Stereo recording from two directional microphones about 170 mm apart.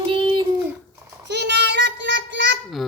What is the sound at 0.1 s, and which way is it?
Child singing, 30° right (ahead or behind).